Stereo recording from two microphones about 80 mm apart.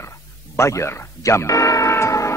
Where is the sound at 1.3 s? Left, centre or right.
Left.